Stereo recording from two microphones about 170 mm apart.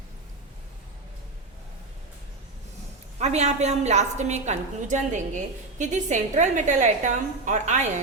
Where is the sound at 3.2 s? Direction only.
40° right (ahead or behind).